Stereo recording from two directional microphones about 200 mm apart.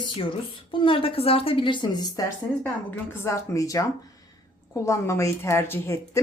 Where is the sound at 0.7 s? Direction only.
25° left (ahead or behind).